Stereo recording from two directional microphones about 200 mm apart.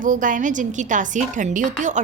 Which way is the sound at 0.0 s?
40° right (ahead or behind).